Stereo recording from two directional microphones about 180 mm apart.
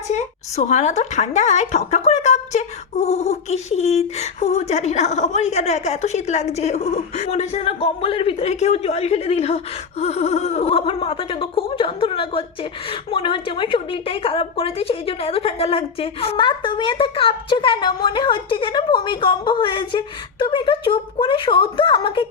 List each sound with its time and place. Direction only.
0.1 s a woman's voice: 40° left (ahead or behind)